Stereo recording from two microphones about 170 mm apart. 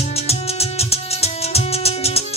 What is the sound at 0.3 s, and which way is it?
Music, 35° left (ahead or behind).